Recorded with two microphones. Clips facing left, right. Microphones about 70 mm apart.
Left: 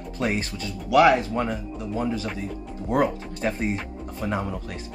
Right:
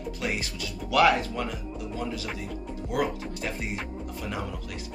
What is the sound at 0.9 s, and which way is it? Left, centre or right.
Speech, left.